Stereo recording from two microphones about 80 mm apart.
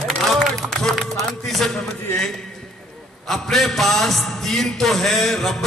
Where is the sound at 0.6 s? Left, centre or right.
Centre.